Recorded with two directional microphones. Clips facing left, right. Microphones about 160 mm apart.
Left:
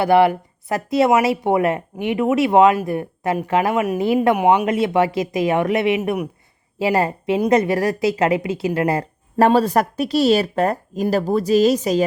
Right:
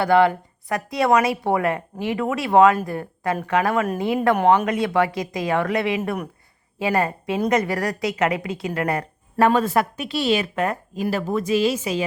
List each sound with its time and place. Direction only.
0.0 s speech: 20° left (ahead or behind)
4.4 s speech: 15° left (ahead or behind)
4.6 s speech: 25° left (ahead or behind)